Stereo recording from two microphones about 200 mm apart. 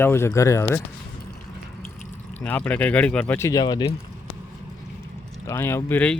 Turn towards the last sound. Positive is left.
turn(degrees=10)  # may be behind; listen again after turning